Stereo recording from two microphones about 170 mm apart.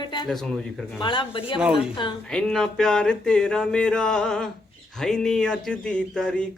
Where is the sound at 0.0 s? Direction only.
25° left (ahead or behind).